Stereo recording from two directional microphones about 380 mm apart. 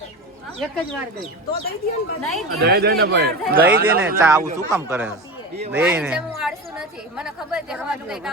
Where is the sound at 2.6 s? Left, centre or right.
Right.